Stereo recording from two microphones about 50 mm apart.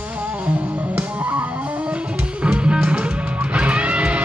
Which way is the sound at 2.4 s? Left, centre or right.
Right.